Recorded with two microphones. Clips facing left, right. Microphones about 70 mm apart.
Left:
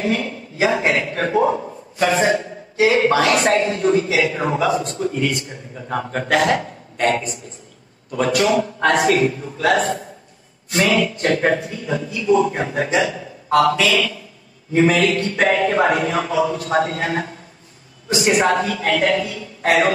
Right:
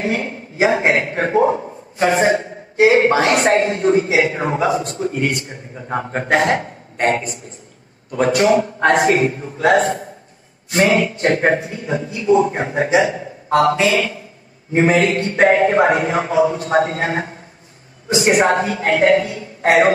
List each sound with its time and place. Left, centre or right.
0.0 s a man's voice: right
18.4 s a woman's voice: right